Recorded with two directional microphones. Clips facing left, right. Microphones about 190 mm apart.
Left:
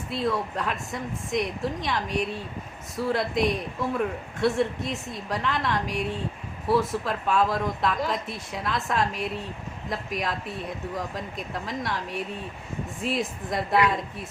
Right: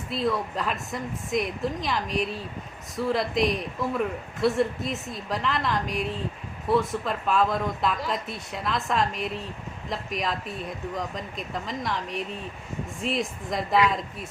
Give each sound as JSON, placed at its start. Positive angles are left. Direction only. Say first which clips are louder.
{"t": 0.1, "sound": "a man's voice", "louder": "even", "side_deg": 0}